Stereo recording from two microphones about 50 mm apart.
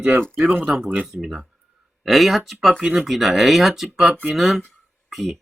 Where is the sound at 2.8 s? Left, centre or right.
Right.